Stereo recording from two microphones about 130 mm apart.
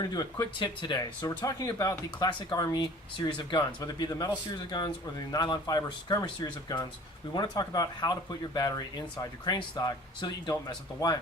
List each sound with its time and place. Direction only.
0.0 s speech: 30° left (ahead or behind)